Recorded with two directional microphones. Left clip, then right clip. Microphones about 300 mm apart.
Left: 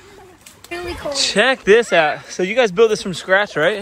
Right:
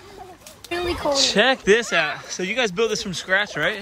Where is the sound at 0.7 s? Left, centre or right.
Right.